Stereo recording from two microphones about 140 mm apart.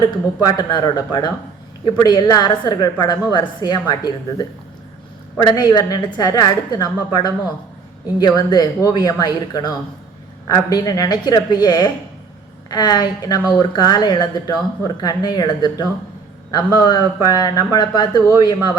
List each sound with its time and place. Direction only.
0.0 s a woman's voice: 30° left (ahead or behind)